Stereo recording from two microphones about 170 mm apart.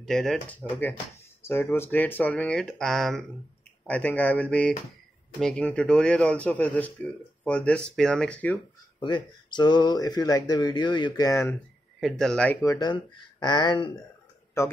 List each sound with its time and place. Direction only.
0.0 s speech: centre (ahead or behind)
9.0 s speech: 25° left (ahead or behind)
12.0 s speech: 5° left (ahead or behind)
12.6 s speech: 25° left (ahead or behind)
14.6 s speech: 15° left (ahead or behind)